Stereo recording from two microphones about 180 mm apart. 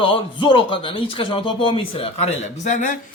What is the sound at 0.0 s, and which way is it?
Speech, 25° left (ahead or behind).